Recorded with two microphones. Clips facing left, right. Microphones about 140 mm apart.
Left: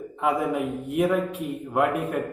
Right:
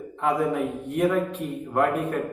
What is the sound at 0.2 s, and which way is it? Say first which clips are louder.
A man's voice: right 1 dB; 5° left (ahead or behind).